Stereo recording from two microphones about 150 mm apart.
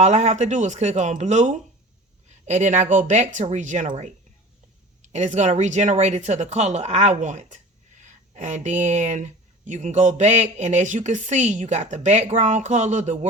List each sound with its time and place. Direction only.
0.0 s speech: 50° right (ahead or behind)